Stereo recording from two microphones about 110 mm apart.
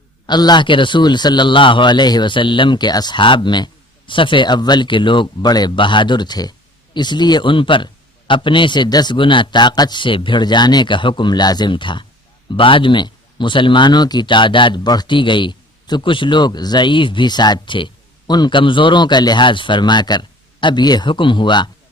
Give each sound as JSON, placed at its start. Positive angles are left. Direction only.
{"t": 0.3, "sound": "a man's voice", "side_deg": 40}